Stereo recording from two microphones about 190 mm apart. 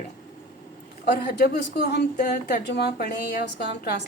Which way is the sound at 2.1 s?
45° left (ahead or behind).